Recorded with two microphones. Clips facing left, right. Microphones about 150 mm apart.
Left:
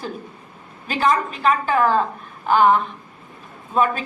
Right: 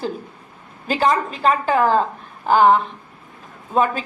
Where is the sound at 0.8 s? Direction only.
35° right (ahead or behind).